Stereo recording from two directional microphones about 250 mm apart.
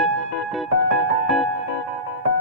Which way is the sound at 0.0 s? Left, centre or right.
Centre.